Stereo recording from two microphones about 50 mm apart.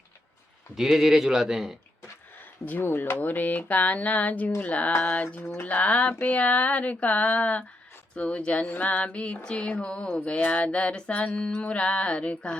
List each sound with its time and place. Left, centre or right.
0.8 s speech: centre
2.6 s speech: left
5.6 s a sound: left